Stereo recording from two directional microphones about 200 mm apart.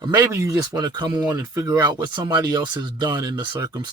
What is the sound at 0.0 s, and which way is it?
Speech, 20° right (ahead or behind).